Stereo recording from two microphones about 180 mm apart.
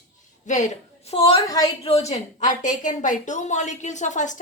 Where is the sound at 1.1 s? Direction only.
35° left (ahead or behind).